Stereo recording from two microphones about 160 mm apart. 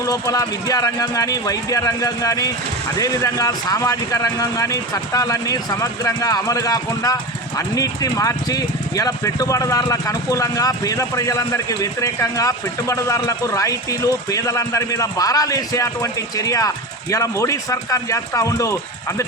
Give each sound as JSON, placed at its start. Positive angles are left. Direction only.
{"t": 0.0, "sound": "speech", "side_deg": 20}